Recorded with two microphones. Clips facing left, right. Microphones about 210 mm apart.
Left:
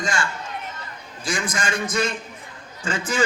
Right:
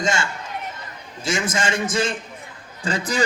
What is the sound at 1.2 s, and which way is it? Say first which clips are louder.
A man's voice: right 3 dB; 25° right (ahead or behind).